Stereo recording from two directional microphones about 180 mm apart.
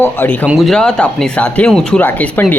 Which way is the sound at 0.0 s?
10° left (ahead or behind).